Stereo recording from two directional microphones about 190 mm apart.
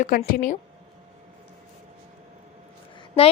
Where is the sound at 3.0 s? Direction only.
30° left (ahead or behind).